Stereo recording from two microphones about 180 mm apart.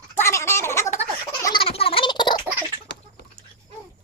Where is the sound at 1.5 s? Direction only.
30° left (ahead or behind).